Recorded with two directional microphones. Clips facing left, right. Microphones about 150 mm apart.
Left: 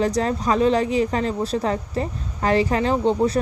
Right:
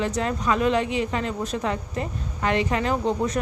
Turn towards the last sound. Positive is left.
turn(degrees=30)  # may be behind; listen again after turning